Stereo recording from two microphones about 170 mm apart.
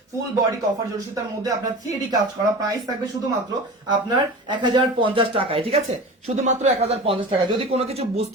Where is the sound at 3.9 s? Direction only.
25° right (ahead or behind).